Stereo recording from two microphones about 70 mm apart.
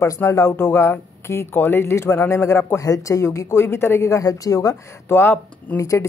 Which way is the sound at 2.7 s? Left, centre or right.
Left.